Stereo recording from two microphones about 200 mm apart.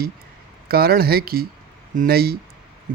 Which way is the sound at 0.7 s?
50° right (ahead or behind).